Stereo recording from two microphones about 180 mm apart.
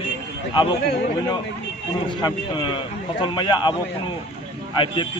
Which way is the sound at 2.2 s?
25° left (ahead or behind).